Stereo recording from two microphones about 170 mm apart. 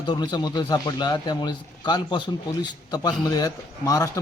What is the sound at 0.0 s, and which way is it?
A man's voice, 25° left (ahead or behind).